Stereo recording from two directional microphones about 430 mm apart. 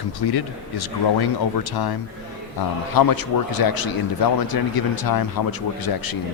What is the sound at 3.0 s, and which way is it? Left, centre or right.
Speech, left.